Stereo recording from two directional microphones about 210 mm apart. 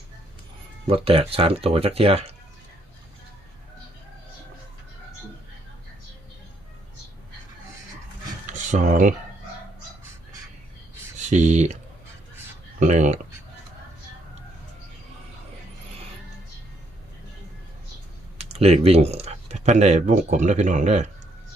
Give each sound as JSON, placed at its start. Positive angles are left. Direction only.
{"t": 0.9, "sound": "speech", "side_deg": -25}
{"t": 8.4, "sound": "a sound", "side_deg": -35}
{"t": 11.3, "sound": "speech", "side_deg": -35}
{"t": 12.8, "sound": "speech", "side_deg": -35}
{"t": 18.3, "sound": "speech", "side_deg": -30}